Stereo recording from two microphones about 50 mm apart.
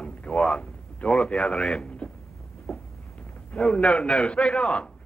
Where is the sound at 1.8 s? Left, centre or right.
Left.